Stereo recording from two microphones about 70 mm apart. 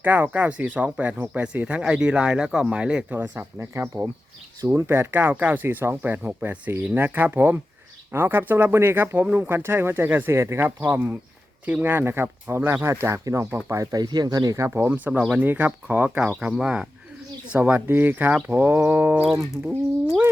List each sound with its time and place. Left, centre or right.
0.0 s speech: right
3.2 s speech: right
10.3 s speech: right
10.8 s speech: right
13.7 s speech: right
14.7 s speech: right
17.5 s speech: right